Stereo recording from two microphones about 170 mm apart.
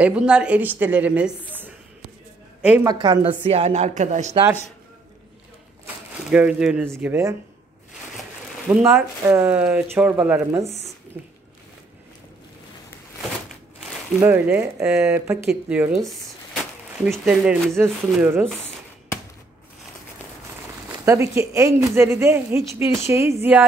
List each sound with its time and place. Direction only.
0.0 s speech: 5° right (ahead or behind)
2.9 s a woman's voice: 25° right (ahead or behind); by 4.4 s 45° right (ahead or behind)
6.3 s speech: 5° right (ahead or behind)
8.6 s speech: 10° right (ahead or behind)
14.2 s speech: 10° right (ahead or behind)
17.0 s speech: 5° right (ahead or behind)
21.0 s speech: 15° right (ahead or behind)